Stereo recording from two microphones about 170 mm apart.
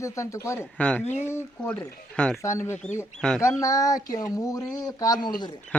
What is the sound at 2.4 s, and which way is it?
Speech, 15° left (ahead or behind).